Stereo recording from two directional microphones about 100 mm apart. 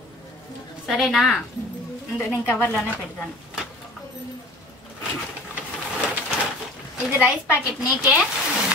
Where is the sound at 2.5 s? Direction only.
20° left (ahead or behind).